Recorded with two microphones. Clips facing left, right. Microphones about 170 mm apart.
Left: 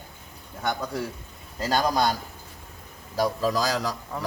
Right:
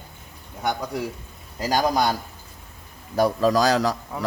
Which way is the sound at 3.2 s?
70° right (ahead or behind).